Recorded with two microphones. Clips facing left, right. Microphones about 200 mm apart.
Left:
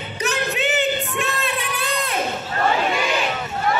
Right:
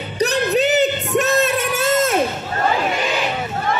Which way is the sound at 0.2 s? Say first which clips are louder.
Right 7 dB; 35° right (ahead or behind).